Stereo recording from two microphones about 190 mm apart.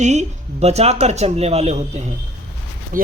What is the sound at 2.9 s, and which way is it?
Speech, 45° right (ahead or behind).